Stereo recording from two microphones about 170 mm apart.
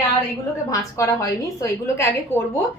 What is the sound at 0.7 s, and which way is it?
A woman's voice, 20° left (ahead or behind).